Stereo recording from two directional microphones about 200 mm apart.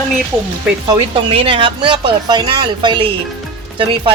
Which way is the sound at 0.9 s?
25° right (ahead or behind).